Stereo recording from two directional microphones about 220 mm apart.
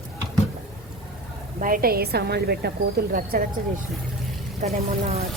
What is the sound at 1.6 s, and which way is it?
A woman's voice, 40° right (ahead or behind).